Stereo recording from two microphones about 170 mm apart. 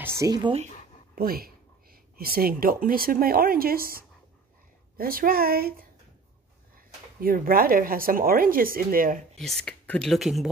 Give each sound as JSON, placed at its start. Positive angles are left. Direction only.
{"t": 0.2, "sound": "speech", "side_deg": -25}
{"t": 1.1, "sound": "speech", "side_deg": -60}
{"t": 7.2, "sound": "speech", "side_deg": -60}
{"t": 9.4, "sound": "speech", "side_deg": 5}